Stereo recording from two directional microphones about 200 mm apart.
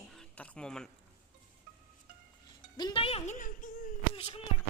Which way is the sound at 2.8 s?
25° left (ahead or behind).